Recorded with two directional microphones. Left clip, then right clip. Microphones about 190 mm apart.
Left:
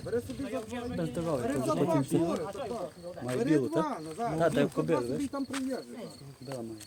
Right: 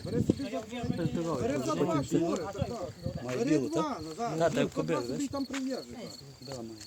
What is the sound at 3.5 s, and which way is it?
Speech, 50° left (ahead or behind).